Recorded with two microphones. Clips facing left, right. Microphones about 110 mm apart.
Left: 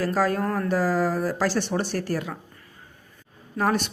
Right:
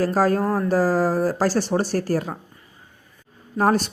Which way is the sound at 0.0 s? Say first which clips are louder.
Right 4 dB; 40° right (ahead or behind).